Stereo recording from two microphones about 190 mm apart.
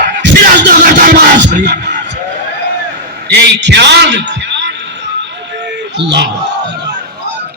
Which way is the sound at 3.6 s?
65° right (ahead or behind).